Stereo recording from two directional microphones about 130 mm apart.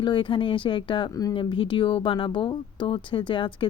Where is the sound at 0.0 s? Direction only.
40° left (ahead or behind).